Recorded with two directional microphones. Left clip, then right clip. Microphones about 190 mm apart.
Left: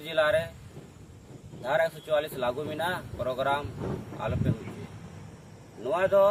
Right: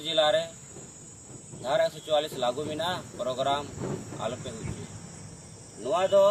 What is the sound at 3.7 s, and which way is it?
Speech, 40° right (ahead or behind).